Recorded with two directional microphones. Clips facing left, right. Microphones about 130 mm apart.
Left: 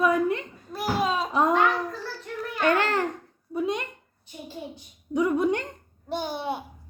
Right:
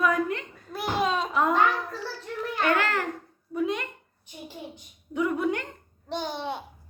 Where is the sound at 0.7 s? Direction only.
5° left (ahead or behind).